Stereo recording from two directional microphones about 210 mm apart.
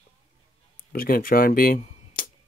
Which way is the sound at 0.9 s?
45° left (ahead or behind).